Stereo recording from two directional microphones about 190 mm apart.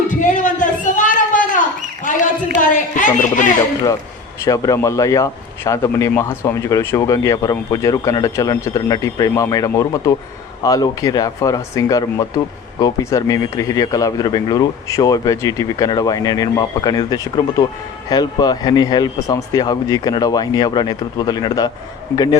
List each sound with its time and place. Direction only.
0.1 s a sound: 40° left (ahead or behind)
2.6 s a woman's voice: 45° left (ahead or behind)
4.4 s speech: 15° left (ahead or behind)